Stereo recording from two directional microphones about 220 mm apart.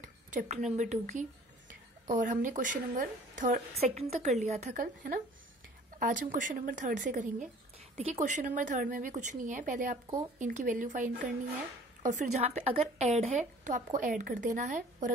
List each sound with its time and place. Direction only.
0.3 s a woman's voice: 35° right (ahead or behind)
2.0 s a woman's voice: 35° right (ahead or behind)